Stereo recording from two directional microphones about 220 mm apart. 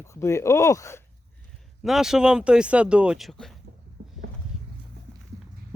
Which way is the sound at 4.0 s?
45° right (ahead or behind).